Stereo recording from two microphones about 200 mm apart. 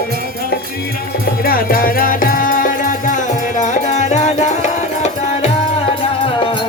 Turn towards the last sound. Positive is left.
turn(degrees=25)  # may be behind; listen again after turning